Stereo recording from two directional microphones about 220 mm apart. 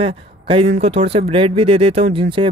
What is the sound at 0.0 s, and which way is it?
Speech, 25° right (ahead or behind).